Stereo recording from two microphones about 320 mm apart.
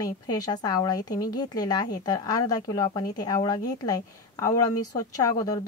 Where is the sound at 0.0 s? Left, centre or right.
Centre.